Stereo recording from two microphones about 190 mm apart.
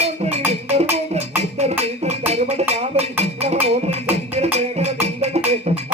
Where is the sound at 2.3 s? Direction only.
35° right (ahead or behind).